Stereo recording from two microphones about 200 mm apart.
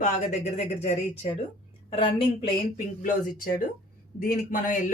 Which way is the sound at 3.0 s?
45° left (ahead or behind).